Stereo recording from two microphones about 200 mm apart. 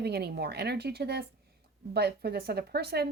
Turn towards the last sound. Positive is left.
turn(degrees=-55)  # may be behind; listen again after turning